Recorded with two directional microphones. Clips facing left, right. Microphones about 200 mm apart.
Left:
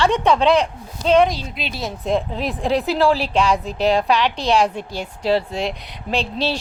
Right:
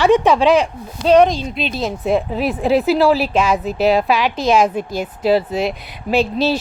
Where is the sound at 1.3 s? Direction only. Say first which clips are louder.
Right 6 dB; 20° right (ahead or behind).